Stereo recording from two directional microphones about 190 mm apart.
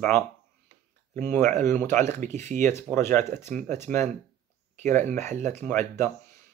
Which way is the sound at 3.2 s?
40° right (ahead or behind).